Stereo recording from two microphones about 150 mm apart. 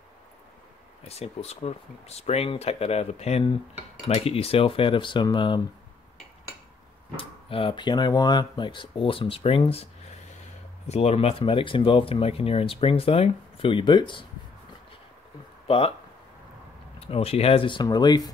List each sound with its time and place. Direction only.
1.0 s speech: 45° left (ahead or behind)
7.2 s speech: 35° left (ahead or behind)
10.9 s speech: 45° left (ahead or behind)
15.6 s speech: 40° left (ahead or behind)
17.0 s speech: 40° left (ahead or behind)